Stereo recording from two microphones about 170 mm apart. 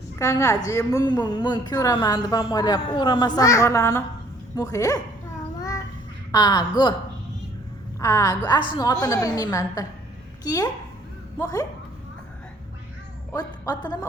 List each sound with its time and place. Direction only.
0.2 s speech: 20° left (ahead or behind)
5.5 s babbling: 20° left (ahead or behind)
6.3 s speech: 25° left (ahead or behind)
7.9 s a woman's voice: 20° left (ahead or behind)
13.3 s a woman's voice: 25° left (ahead or behind)